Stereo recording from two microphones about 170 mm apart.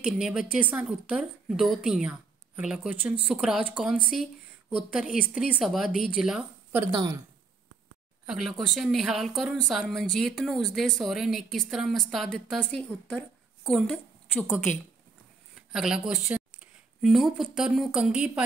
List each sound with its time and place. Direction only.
0.0 s a woman's voice: 5° right (ahead or behind)
6.9 s speech: 25° right (ahead or behind)
8.3 s a woman's voice: centre (ahead or behind)